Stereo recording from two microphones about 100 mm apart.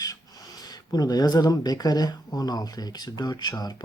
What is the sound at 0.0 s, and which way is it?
Speech, 40° left (ahead or behind).